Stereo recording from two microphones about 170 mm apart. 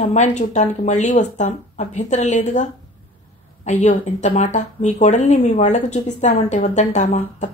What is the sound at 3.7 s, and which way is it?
Speech, 45° left (ahead or behind).